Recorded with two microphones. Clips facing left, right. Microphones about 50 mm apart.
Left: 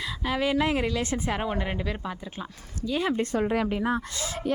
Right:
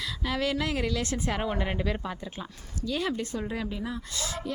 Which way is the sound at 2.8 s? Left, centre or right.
Centre.